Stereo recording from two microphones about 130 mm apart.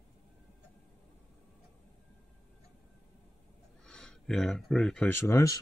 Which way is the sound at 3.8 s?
5° left (ahead or behind).